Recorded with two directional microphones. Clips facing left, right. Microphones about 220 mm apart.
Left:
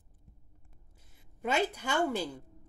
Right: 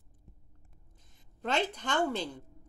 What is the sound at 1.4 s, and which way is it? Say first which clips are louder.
Speech: left 1 dB; 10° left (ahead or behind).